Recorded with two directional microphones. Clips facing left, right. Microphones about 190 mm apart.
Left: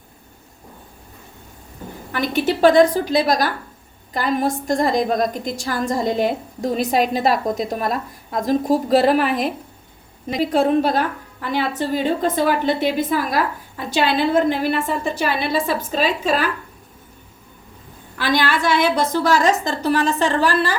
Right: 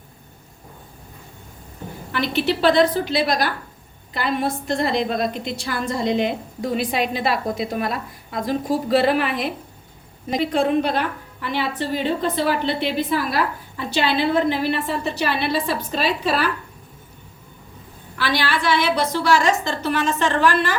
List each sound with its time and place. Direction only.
2.1 s a woman's voice: 45° left (ahead or behind)
18.2 s a woman's voice: 45° left (ahead or behind)